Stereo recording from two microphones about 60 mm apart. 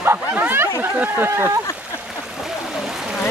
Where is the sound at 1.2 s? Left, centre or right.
Right.